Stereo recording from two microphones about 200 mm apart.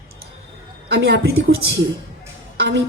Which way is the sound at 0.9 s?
55° right (ahead or behind).